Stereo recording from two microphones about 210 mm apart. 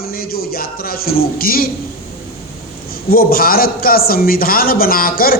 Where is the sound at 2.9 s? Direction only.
45° left (ahead or behind).